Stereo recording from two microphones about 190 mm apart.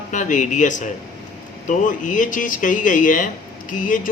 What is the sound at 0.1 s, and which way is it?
Speech, 40° left (ahead or behind).